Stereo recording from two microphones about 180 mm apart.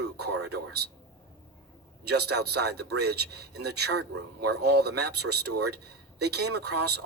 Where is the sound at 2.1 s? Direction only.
65° right (ahead or behind).